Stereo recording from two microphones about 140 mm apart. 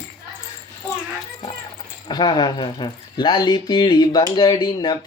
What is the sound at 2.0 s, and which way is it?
Speech, 35° left (ahead or behind).